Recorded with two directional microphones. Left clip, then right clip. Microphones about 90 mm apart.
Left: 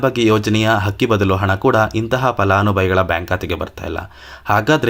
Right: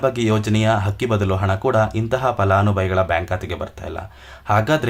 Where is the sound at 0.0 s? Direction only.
30° left (ahead or behind).